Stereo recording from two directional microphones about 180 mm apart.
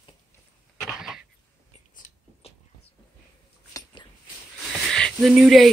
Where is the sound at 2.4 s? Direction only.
35° left (ahead or behind).